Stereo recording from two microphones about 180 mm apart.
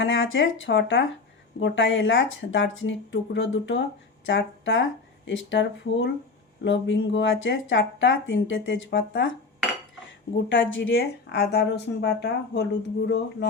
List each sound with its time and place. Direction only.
0.0 s speech: 90° left
10.0 s speech: 90° left; by 13.5 s 70° left (ahead or behind)